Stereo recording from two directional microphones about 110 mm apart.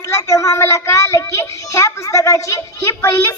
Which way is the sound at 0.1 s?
30° left (ahead or behind).